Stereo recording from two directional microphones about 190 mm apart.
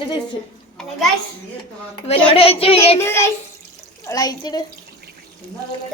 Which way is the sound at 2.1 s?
30° left (ahead or behind).